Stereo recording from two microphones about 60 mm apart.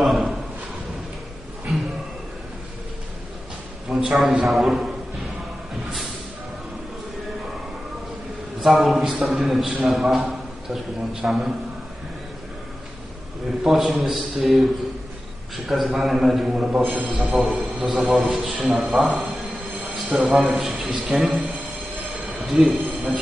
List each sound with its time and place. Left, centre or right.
0.0 s a sound: centre
3.9 s a man's voice: centre
8.6 s a man's voice: centre
13.7 s a man's voice: centre
16.9 s a man's voice: right
17.2 s a man's voice: centre
18.4 s a man's voice: centre
18.7 s a man's voice: centre
22.2 s a sound: centre